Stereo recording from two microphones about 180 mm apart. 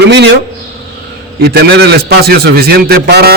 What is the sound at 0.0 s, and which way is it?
Speech, 70° right (ahead or behind).